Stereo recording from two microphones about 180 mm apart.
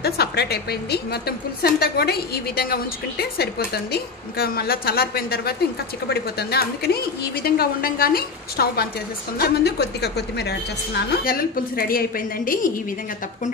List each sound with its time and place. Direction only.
0.0 s a woman's voice: 60° left (ahead or behind)